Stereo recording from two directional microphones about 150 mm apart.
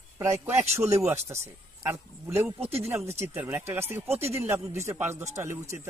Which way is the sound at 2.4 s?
15° right (ahead or behind).